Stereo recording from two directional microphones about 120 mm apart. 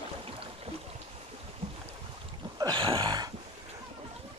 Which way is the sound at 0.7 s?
55° right (ahead or behind).